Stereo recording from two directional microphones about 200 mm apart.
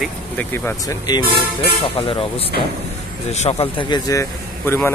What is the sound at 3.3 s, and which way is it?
A man's voice, 35° left (ahead or behind).